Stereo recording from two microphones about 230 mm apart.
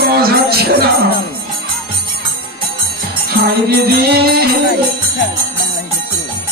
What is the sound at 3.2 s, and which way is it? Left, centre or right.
Music, right.